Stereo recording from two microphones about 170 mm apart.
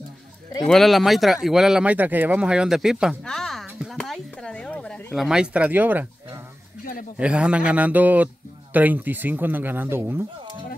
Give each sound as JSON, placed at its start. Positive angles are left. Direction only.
{"t": 0.7, "sound": "speech", "side_deg": 0}
{"t": 6.8, "sound": "a sound", "side_deg": 60}
{"t": 7.2, "sound": "speech", "side_deg": -5}